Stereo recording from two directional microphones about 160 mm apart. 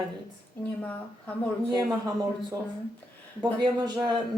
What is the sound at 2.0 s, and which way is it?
Speech, 25° right (ahead or behind).